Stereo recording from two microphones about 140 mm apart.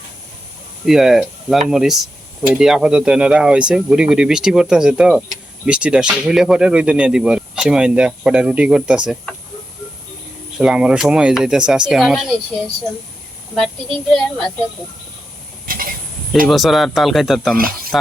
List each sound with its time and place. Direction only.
0.9 s speech: centre (ahead or behind)
10.6 s speech: 5° right (ahead or behind)
14.1 s speech: centre (ahead or behind)
15.6 s a sound: 90° right
16.5 s speech: centre (ahead or behind)
17.6 s speech: 90° right